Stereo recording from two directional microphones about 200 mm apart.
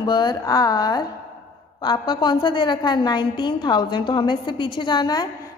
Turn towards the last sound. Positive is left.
turn(degrees=20)  # may be behind; listen again after turning